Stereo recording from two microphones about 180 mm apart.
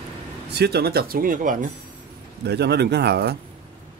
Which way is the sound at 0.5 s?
65° right (ahead or behind).